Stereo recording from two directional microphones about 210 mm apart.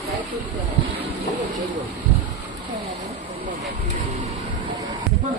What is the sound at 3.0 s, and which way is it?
Speech, 30° right (ahead or behind).